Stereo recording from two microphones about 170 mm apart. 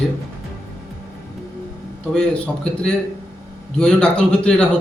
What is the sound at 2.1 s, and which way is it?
Speech, 5° left (ahead or behind).